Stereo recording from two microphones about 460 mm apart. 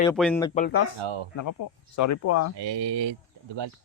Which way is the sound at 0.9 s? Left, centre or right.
Right.